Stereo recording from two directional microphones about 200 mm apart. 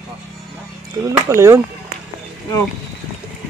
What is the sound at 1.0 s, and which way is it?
Speech, 15° right (ahead or behind).